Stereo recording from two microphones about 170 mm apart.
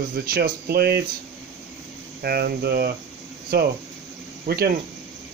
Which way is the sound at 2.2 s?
65° right (ahead or behind).